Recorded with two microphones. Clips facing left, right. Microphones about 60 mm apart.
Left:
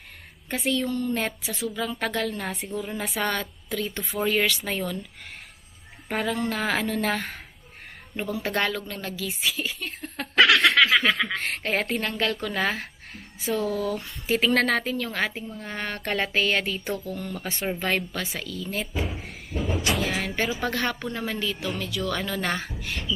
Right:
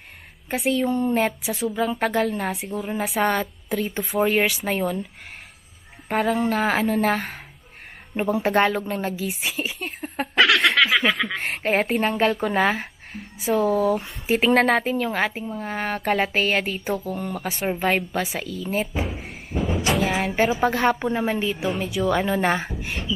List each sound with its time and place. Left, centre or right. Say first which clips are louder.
0.5 s a woman's voice: right 4 dB; centre
1.2 s a woman's voice: right 6 dB; centre
1.7 s a woman's voice: right 6 dB; centre
6.0 s a woman's voice: right 5 dB; centre
8.4 s a woman's voice: right 6 dB; centre
10.3 s snicker: even; centre
11.3 s a woman's voice: right 4 dB; centre
19.0 s a sound: right 2 dB; centre
19.9 s a woman's voice: right 6 dB; centre